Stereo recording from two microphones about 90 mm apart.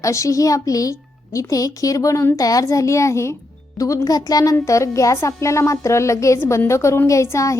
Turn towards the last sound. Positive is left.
turn(degrees=35)  # may be behind; listen again after turning